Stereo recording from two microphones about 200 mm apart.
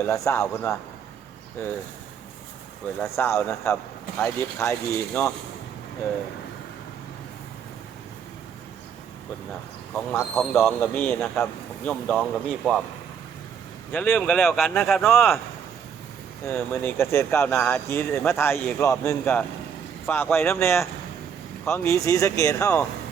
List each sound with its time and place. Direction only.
0.0 s speech: 15° left (ahead or behind)
3.2 s speech: 15° left (ahead or behind)
9.9 s speech: 10° left (ahead or behind)
13.9 s speech: 10° left (ahead or behind)
16.5 s speech: 10° left (ahead or behind)